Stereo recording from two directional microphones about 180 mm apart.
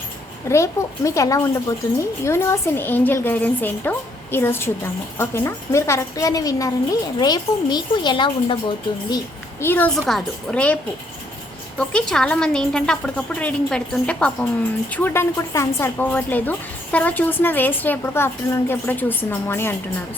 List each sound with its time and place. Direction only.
0.4 s a woman's voice: 15° left (ahead or behind)
11.8 s a woman's voice: 5° left (ahead or behind)